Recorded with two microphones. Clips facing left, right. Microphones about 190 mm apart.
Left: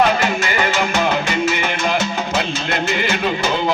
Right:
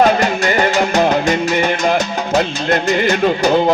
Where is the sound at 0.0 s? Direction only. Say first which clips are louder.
Right 4 dB; 40° right (ahead or behind).